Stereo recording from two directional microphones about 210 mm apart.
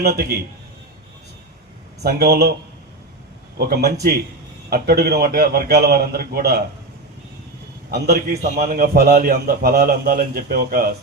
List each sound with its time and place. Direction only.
0.0 s a man's voice: 45° right (ahead or behind)
2.0 s a man's voice: 50° right (ahead or behind)
3.6 s a man's voice: 50° right (ahead or behind)
7.9 s a man's voice: 50° right (ahead or behind)